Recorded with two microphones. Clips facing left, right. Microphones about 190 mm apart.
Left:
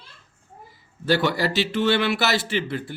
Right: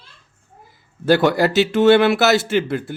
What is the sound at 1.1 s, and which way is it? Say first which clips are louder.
Speech: right 6 dB; 50° right (ahead or behind).